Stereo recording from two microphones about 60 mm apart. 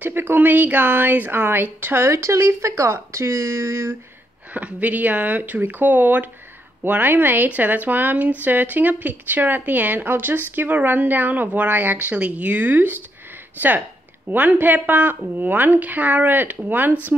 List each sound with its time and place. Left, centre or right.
0.0 s a woman's voice: right
4.6 s a woman's voice: right
14.3 s a woman's voice: right